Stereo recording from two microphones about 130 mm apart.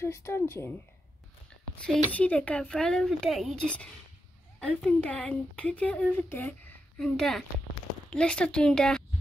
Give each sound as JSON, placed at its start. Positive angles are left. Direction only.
{"t": 0.0, "sound": "speech", "side_deg": 20}
{"t": 2.1, "sound": "speech", "side_deg": 10}